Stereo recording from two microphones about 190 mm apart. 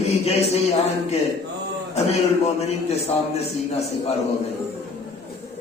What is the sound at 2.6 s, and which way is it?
A man's voice, 35° left (ahead or behind).